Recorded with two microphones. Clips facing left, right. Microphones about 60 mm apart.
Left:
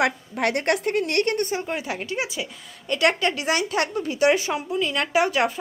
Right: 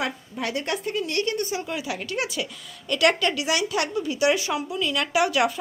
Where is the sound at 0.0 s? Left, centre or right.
Left.